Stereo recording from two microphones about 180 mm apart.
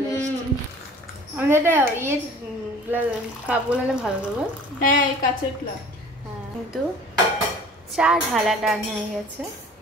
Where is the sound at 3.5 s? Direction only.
5° right (ahead or behind).